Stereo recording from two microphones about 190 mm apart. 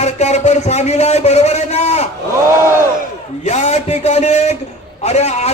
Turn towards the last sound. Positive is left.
turn(degrees=35)  # may be behind; listen again after turning